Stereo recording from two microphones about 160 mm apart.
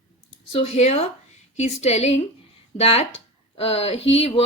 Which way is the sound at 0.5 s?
40° left (ahead or behind).